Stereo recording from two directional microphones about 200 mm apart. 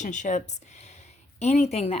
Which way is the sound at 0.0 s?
35° left (ahead or behind).